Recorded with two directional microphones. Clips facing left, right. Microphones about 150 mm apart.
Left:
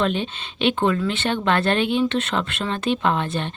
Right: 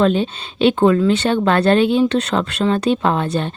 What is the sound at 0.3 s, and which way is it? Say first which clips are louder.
Speech: right 7 dB; 40° right (ahead or behind).